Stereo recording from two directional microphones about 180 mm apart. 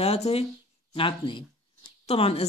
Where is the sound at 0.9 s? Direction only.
30° left (ahead or behind).